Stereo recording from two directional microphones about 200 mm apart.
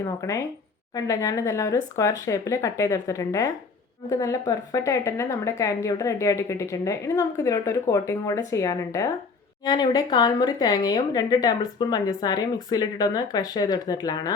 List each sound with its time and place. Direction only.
0.2 s a woman's voice: 15° left (ahead or behind)